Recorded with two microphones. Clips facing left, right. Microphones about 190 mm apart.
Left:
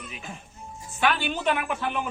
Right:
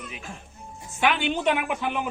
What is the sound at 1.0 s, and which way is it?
Speech, 20° right (ahead or behind).